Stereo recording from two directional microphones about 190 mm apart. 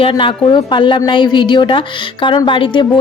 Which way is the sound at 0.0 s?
25° left (ahead or behind).